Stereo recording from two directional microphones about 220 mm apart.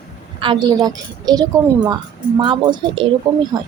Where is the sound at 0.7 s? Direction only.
15° right (ahead or behind).